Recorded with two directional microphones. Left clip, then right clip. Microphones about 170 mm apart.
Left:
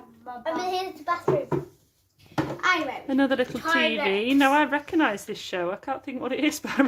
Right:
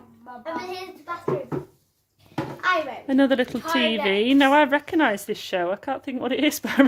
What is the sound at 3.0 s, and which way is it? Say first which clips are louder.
A woman's voice: right 5 dB; 35° right (ahead or behind).